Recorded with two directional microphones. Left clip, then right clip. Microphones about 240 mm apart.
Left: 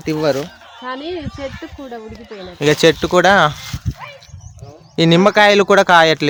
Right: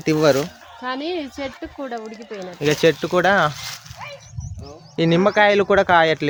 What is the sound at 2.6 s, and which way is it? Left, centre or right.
Speech, left.